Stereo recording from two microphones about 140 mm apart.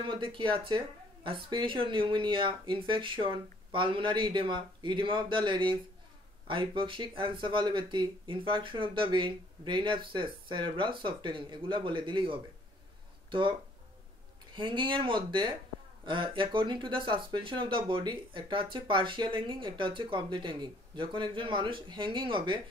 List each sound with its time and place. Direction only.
0.0 s speech: 35° right (ahead or behind)